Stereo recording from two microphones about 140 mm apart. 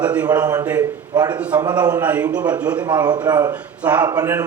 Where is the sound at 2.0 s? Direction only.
10° right (ahead or behind).